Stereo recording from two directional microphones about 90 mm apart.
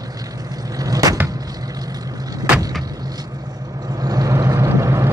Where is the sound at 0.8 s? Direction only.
45° right (ahead or behind).